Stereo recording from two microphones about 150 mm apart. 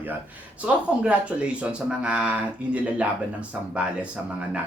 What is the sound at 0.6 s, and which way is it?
Speech, 10° right (ahead or behind).